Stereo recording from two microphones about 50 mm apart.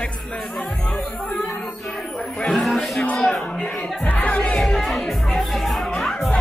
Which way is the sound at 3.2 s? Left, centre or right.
Centre.